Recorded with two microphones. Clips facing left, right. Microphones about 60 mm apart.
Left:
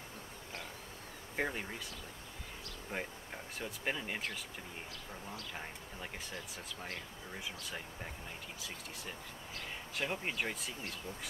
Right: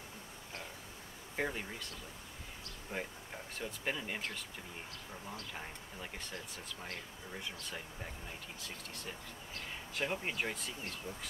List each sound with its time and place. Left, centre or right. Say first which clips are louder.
1.3 s speech: left 1 dB; centre
2.9 s speech: even; left
3.5 s speech: even; centre
5.5 s speech: left 1 dB; centre
7.3 s speech: even; centre